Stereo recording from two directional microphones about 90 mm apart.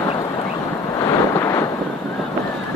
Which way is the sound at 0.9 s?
40° left (ahead or behind).